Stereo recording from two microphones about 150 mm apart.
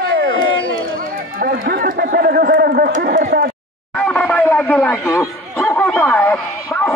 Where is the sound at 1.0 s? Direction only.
70° right (ahead or behind); by 2.9 s 90° right.